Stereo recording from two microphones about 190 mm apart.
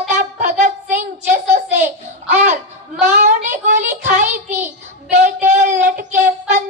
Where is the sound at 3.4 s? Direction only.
40° right (ahead or behind).